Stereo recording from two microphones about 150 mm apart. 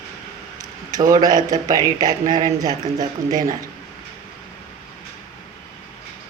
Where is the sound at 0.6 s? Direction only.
25° right (ahead or behind).